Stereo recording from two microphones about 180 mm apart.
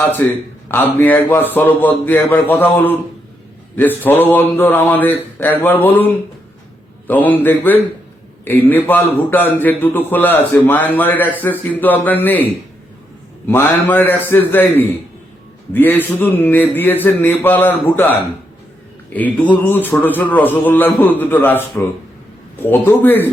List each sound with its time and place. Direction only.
0.0 s a man's voice: 10° left (ahead or behind)
7.1 s a man's voice: 10° left (ahead or behind)
19.6 s a man's voice: 10° left (ahead or behind)
22.9 s a man's voice: 10° left (ahead or behind)